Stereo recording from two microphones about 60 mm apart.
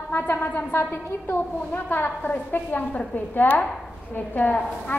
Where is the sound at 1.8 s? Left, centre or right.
Left.